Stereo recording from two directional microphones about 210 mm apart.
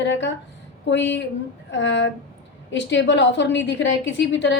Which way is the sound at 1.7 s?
60° left (ahead or behind).